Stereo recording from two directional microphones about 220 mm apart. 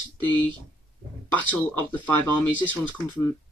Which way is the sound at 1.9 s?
5° left (ahead or behind).